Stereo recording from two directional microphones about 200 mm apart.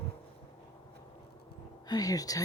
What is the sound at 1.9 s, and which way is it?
Speech, 20° left (ahead or behind).